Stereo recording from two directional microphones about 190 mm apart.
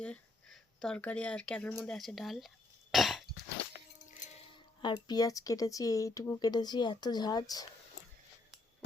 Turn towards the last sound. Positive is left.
turn(degrees=20)  # may be behind; listen again after turning